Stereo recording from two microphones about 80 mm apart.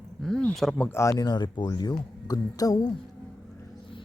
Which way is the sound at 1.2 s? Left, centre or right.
Left.